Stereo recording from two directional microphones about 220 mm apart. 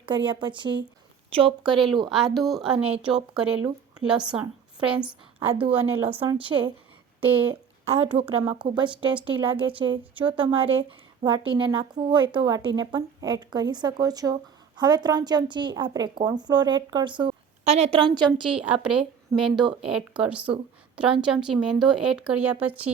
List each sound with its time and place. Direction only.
0.0 s a woman's voice: 20° right (ahead or behind)
2.0 s speech: centre (ahead or behind)
5.5 s a woman's voice: 25° right (ahead or behind)
7.2 s speech: 10° right (ahead or behind)
7.9 s a woman's voice: 25° right (ahead or behind)
18.5 s a woman's voice: 5° right (ahead or behind)